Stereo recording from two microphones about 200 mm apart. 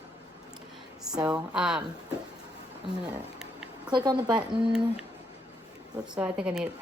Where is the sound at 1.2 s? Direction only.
5° right (ahead or behind).